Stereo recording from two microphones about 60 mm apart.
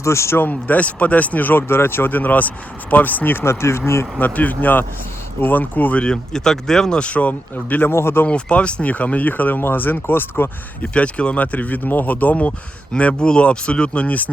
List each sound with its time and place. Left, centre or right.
0.0 s speech: left
0.3 s speech: left
3.4 s speech: left
4.4 s speech: left
6.0 s speech: centre; by 8.3 s left
8.3 s speech: centre; by 10.5 s left
10.9 s speech: centre